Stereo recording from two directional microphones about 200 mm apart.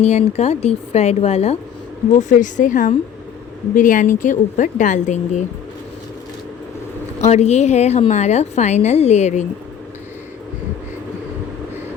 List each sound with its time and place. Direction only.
0.0 s a woman's voice: 30° left (ahead or behind)
7.2 s a woman's voice: 35° left (ahead or behind)